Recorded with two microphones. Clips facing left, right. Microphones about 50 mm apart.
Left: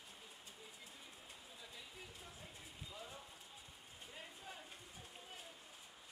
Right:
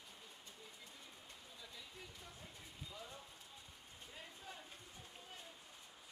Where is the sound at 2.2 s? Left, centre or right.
Centre.